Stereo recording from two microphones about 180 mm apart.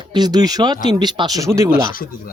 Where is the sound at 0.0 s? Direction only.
25° right (ahead or behind).